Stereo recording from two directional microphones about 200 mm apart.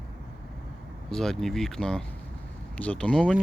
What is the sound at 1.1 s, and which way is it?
Speech, centre (ahead or behind).